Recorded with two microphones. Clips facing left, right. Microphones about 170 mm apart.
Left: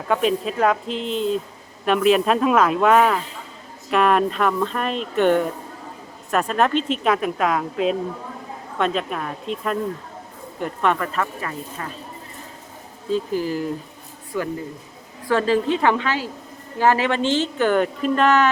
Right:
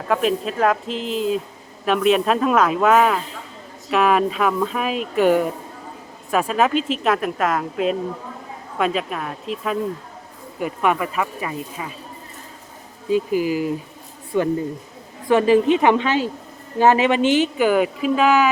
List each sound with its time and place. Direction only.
0.1 s speech: centre (ahead or behind)
13.1 s speech: 10° right (ahead or behind)
14.3 s a woman's voice: 25° right (ahead or behind); by 18.5 s 10° right (ahead or behind)